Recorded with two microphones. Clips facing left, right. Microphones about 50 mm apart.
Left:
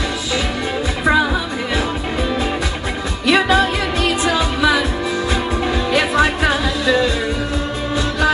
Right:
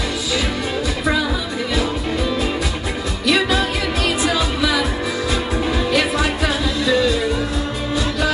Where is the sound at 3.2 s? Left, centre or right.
Left.